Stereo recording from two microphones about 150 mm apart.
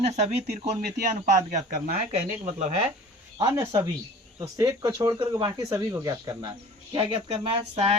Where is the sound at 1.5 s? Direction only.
70° right (ahead or behind).